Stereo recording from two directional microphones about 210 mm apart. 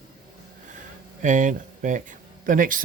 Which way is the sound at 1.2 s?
35° right (ahead or behind).